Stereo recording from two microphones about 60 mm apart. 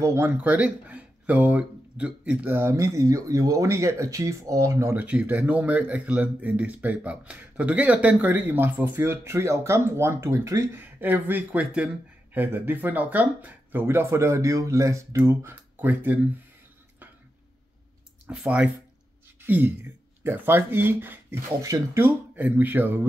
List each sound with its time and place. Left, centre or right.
0.0 s speech: right
0.4 s speech: right
2.7 s speech: right
4.9 s speech: right
10.7 s speech: right
12.4 s speech: right
15.1 s speech: right
18.4 s speech: centre
19.4 s speech: right